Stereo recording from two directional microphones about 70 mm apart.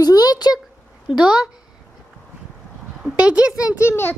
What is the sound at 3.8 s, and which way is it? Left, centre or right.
Speech, left.